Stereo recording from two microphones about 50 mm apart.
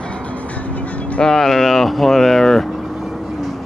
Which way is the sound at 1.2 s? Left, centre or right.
Centre.